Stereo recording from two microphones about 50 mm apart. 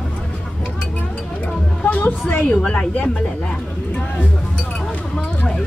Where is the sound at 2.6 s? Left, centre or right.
Centre.